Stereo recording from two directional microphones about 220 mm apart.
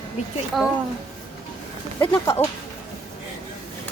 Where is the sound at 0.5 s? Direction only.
Centre (ahead or behind).